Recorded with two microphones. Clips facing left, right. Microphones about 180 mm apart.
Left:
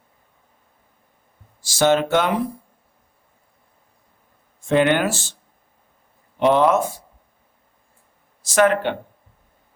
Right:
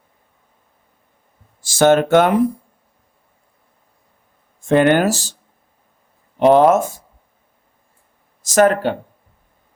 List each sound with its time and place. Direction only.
1.6 s speech: 50° right (ahead or behind)
4.7 s speech: 45° right (ahead or behind)
6.4 s speech: 45° right (ahead or behind)
8.4 s speech: 40° right (ahead or behind)